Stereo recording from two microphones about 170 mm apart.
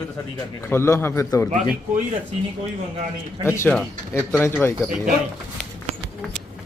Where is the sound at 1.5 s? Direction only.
45° right (ahead or behind).